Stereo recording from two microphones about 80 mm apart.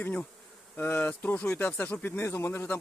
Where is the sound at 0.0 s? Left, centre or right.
Left.